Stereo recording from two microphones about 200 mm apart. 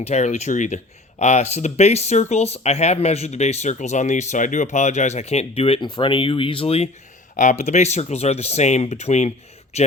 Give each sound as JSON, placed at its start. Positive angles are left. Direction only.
{"t": 0.0, "sound": "speech", "side_deg": 35}